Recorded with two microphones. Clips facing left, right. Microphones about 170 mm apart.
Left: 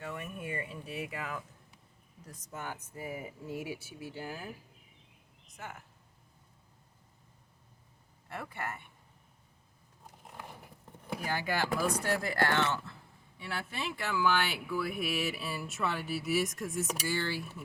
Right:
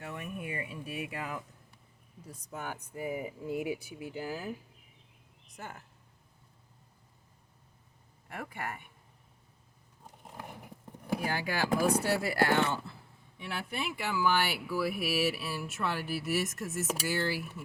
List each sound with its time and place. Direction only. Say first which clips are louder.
0.1 s a sound: right 2 dB; 15° right (ahead or behind)
2.2 s speech: right 2 dB; 10° right (ahead or behind)
8.3 s speech: even; 10° right (ahead or behind)
11.0 s speech: right 3 dB; 10° right (ahead or behind)